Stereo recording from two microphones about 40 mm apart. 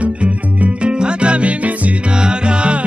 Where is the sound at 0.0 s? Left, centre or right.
Right.